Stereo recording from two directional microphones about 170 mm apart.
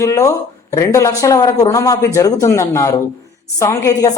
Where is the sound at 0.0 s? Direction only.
20° left (ahead or behind).